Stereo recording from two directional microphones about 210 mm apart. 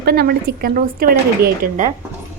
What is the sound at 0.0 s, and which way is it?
A woman's voice, 50° right (ahead or behind).